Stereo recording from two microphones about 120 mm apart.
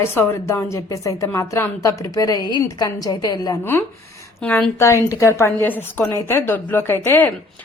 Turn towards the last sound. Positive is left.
turn(degrees=20)  # may be behind; listen again after turning